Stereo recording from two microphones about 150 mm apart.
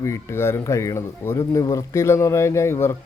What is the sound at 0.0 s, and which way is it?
Speech, 20° left (ahead or behind).